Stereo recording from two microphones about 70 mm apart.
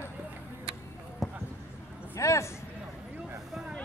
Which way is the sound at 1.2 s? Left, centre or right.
Centre.